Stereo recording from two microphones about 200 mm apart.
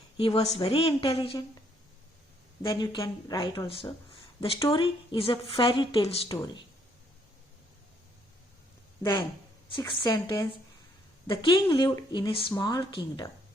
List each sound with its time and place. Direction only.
0.2 s speech: 30° left (ahead or behind)
2.6 s speech: 25° left (ahead or behind)
9.7 s speech: 25° left (ahead or behind)